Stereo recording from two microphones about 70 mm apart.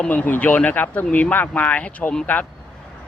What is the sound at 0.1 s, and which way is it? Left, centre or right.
Speech, left.